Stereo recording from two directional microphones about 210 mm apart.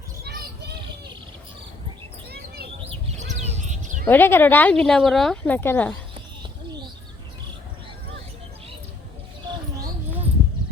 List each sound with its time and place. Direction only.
3.2 s bird: 35° right (ahead or behind)
4.0 s speech: 10° left (ahead or behind)